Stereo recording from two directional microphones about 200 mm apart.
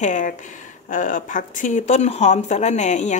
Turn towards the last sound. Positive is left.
turn(degrees=35)  # may be behind; listen again after turning